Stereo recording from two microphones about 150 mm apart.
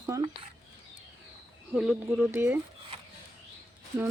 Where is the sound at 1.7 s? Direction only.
5° right (ahead or behind).